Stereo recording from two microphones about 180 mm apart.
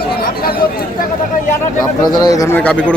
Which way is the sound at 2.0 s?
20° left (ahead or behind).